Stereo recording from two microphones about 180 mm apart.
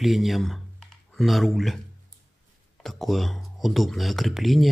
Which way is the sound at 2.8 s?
Centre (ahead or behind).